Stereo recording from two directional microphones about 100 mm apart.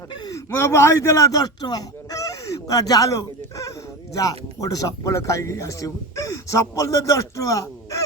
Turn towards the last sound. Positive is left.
turn(degrees=35)  # may be behind; listen again after turning